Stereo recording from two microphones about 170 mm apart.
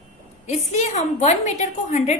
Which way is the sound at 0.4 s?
40° left (ahead or behind).